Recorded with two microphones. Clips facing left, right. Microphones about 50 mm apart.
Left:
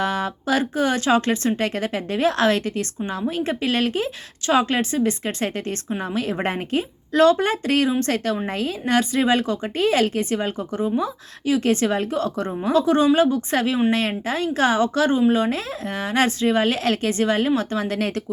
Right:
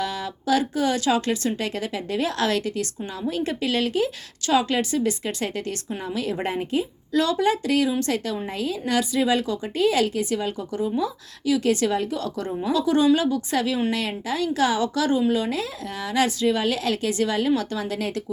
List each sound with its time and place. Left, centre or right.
0.0 s a woman's voice: left